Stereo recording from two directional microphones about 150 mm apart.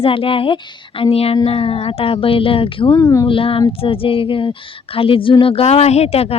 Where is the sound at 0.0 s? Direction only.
35° left (ahead or behind).